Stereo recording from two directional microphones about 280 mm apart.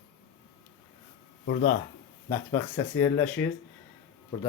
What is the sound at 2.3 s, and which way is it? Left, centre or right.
Speech, centre.